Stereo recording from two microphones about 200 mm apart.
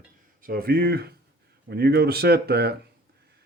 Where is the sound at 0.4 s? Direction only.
50° right (ahead or behind).